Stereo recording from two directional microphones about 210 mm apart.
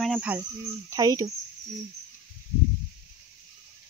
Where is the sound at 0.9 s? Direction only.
15° right (ahead or behind).